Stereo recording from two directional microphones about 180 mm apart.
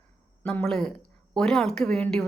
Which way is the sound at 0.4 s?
5° left (ahead or behind).